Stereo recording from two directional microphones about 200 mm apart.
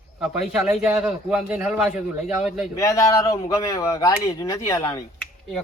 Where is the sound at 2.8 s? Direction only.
15° left (ahead or behind).